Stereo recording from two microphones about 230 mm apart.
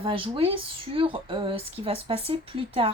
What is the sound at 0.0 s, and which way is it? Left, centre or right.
Speech, right.